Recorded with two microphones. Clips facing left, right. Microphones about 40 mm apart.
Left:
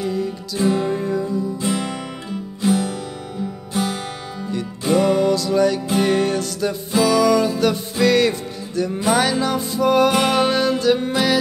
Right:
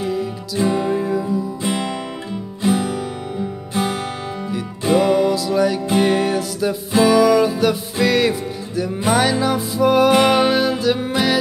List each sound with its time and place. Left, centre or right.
0.0 s music: centre
1.6 s music: right
4.5 s music: centre